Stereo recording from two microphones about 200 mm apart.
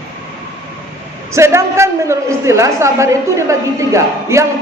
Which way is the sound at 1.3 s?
15° right (ahead or behind).